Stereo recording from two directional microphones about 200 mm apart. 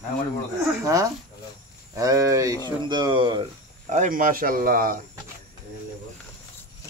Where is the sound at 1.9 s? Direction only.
15° right (ahead or behind).